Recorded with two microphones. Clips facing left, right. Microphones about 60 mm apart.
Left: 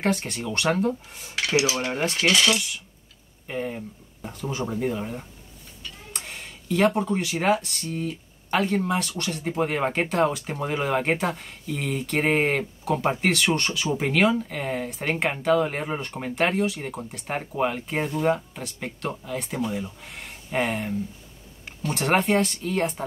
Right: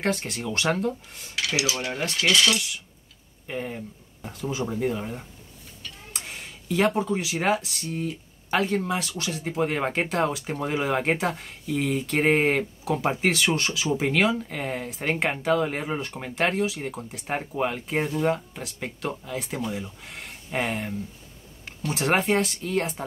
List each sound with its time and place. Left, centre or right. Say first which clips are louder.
0.0 s speech: left 1 dB; centre
1.3 s cutlery: left 4 dB; left
2.5 s speech: left 1 dB; centre